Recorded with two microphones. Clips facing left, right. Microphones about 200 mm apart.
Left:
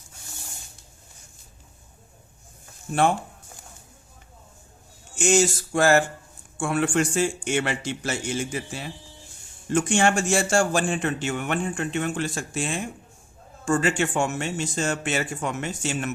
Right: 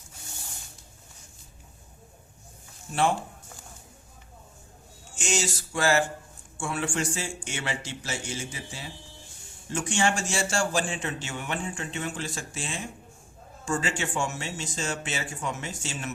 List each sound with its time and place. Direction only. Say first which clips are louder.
5.1 s a man's voice: left 9 dB; 55° left (ahead or behind)